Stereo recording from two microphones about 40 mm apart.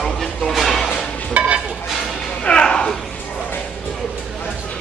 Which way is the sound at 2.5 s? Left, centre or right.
Left.